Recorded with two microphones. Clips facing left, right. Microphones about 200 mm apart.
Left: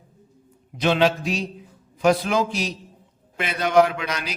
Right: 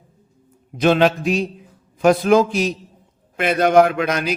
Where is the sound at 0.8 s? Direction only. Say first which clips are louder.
Right 4 dB; 50° right (ahead or behind).